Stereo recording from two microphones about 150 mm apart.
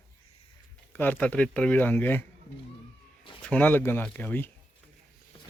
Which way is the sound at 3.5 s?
10° left (ahead or behind).